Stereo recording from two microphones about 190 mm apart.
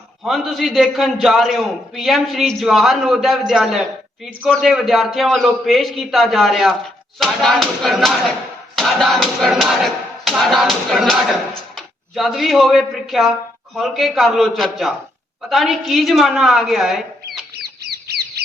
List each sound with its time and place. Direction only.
0.3 s a man's voice: centre (ahead or behind)
17.6 s chicken: 55° right (ahead or behind)